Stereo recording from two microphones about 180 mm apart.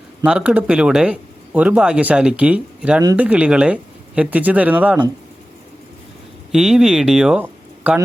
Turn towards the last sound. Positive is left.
turn(degrees=-5)  # may be behind; listen again after turning